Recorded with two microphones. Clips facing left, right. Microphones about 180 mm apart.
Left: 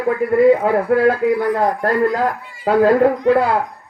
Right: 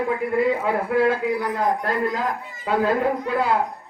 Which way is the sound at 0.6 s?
40° left (ahead or behind).